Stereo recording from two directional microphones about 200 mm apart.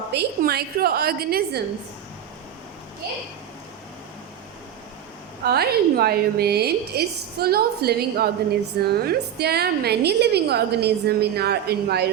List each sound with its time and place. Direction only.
0.1 s a woman's voice: 55° right (ahead or behind)
5.5 s a woman's voice: 50° right (ahead or behind)